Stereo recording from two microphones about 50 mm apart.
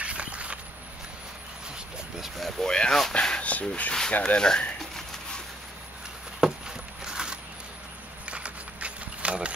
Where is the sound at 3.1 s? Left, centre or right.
Left.